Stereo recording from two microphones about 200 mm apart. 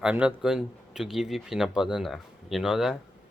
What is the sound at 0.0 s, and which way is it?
Speech, 5° right (ahead or behind).